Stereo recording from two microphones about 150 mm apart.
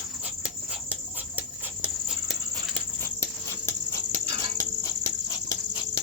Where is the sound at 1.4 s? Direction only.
5° right (ahead or behind).